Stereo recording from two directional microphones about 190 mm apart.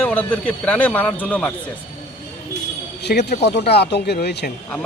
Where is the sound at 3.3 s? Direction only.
60° left (ahead or behind).